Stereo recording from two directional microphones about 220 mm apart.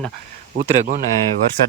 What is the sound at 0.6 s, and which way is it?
Speech, 40° right (ahead or behind).